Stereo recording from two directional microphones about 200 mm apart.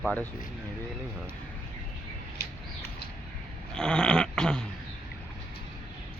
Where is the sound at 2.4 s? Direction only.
55° left (ahead or behind).